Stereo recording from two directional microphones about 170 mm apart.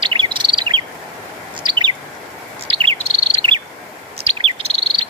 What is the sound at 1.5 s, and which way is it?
Bird, 25° right (ahead or behind).